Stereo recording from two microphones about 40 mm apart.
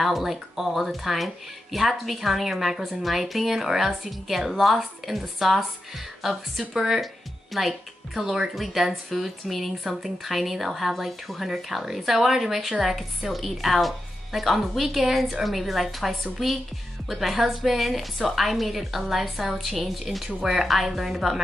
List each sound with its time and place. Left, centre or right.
0.0 s speech: centre
6.6 s speech: centre
7.5 s speech: centre